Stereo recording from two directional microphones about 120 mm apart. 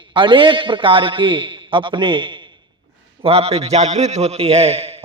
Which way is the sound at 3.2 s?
55° right (ahead or behind).